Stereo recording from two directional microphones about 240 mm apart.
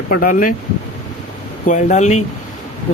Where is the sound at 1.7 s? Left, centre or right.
Left.